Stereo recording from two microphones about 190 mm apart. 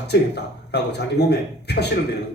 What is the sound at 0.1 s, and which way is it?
A man's voice, 60° left (ahead or behind).